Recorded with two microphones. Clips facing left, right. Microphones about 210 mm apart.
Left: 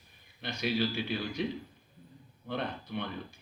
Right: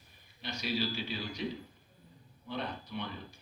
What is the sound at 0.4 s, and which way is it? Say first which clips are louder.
A man's voice: left 4 dB; 55° left (ahead or behind).